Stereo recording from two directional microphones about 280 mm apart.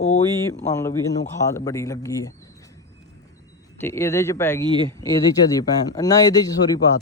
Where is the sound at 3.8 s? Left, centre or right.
Centre.